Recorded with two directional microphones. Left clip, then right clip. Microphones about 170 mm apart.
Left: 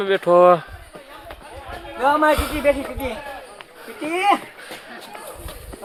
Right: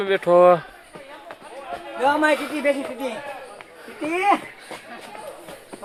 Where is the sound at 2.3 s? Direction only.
30° left (ahead or behind).